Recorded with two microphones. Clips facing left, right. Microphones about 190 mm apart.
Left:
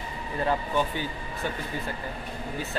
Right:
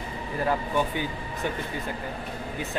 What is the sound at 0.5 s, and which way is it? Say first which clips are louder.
Speech: even; 10° right (ahead or behind).